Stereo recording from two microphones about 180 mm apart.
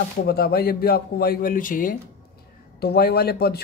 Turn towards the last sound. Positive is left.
turn(degrees=60)  # may be behind; listen again after turning